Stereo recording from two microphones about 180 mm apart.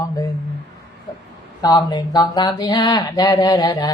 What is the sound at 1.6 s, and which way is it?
Speech, 20° left (ahead or behind).